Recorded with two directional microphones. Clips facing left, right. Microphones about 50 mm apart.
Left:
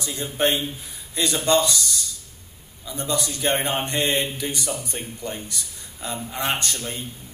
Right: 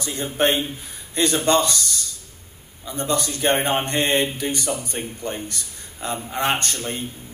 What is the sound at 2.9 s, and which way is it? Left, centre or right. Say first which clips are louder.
Speech: right 3 dB; right.